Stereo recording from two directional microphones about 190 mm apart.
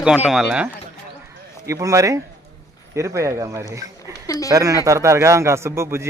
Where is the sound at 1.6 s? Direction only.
15° right (ahead or behind).